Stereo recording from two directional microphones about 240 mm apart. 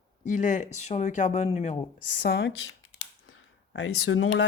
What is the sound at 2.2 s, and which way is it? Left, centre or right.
Speech, left.